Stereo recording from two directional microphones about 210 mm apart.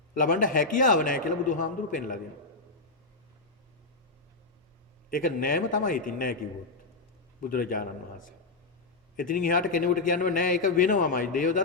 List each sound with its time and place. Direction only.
0.2 s a man's voice: 40° left (ahead or behind)
5.1 s a man's voice: 40° left (ahead or behind)
7.4 s a man's voice: 40° left (ahead or behind)